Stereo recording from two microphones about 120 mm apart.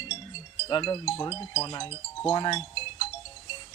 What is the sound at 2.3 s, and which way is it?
Speech, 35° left (ahead or behind).